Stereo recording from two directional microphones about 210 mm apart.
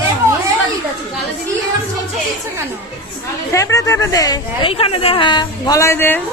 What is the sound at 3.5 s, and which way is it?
A woman's voice, 15° left (ahead or behind).